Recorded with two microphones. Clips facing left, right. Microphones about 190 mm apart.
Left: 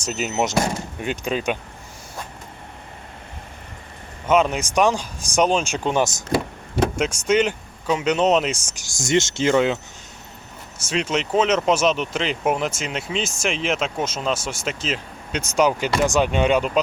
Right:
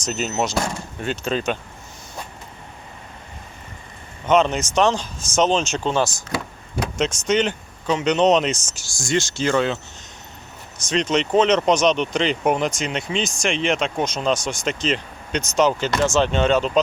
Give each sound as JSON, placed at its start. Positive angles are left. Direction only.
{"t": 0.0, "sound": "speech", "side_deg": 10}
{"t": 4.3, "sound": "speech", "side_deg": 10}
{"t": 10.8, "sound": "speech", "side_deg": 10}